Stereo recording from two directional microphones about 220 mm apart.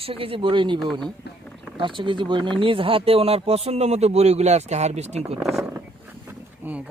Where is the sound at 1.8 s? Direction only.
20° right (ahead or behind).